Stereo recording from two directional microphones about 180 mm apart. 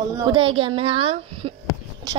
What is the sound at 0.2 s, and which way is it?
Speech, 30° right (ahead or behind).